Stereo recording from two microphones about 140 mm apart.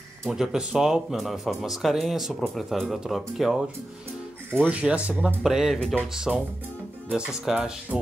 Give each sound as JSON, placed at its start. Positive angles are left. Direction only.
{"t": 0.2, "sound": "speech", "side_deg": -5}
{"t": 4.6, "sound": "speech", "side_deg": -10}